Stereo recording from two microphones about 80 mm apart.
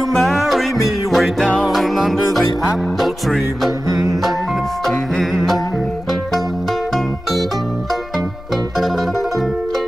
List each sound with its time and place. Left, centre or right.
0.1 s music: centre
4.8 s music: centre